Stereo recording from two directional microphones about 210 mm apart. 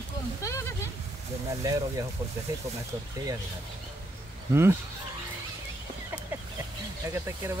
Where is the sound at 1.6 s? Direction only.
15° right (ahead or behind).